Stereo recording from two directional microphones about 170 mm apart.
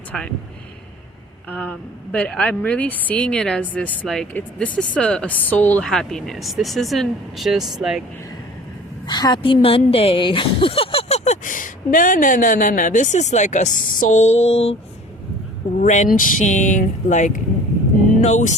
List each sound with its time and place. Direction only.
1.5 s speech: 10° left (ahead or behind)
9.0 s a woman's voice: 25° left (ahead or behind)
15.8 s a woman's voice: 50° left (ahead or behind)
18.2 s music: 45° left (ahead or behind)